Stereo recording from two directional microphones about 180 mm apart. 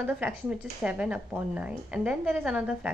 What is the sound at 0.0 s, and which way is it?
A woman's voice, 5° right (ahead or behind).